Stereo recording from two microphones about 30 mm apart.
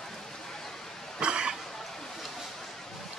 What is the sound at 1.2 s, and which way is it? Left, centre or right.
Cough, right.